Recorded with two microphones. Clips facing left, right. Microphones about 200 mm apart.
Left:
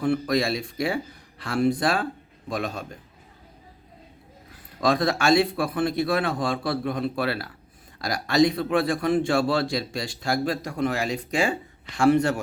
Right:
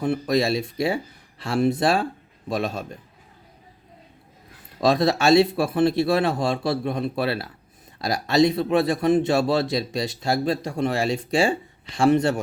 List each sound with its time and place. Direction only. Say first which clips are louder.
0.0 s a man's voice: right 1 dB; 20° right (ahead or behind)
4.8 s a man's voice: right 3 dB; 25° right (ahead or behind)